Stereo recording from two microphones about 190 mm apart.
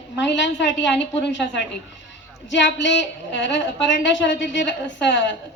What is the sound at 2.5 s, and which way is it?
A woman's voice, 70° left (ahead or behind).